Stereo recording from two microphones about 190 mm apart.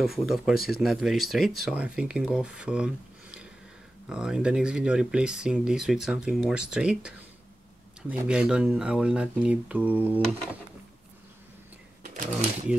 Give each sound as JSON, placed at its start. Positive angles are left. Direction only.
{"t": 0.0, "sound": "speech", "side_deg": 0}
{"t": 12.0, "sound": "shuffling cards", "side_deg": -45}